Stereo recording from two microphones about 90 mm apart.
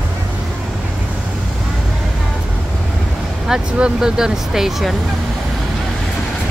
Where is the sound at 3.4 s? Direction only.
10° right (ahead or behind).